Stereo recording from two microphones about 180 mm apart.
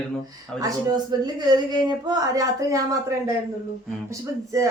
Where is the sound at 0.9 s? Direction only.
25° right (ahead or behind).